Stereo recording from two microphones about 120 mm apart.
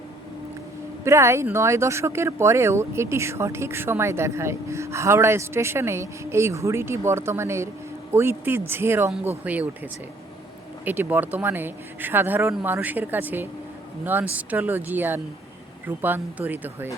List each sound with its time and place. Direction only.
1.0 s speech: 20° right (ahead or behind)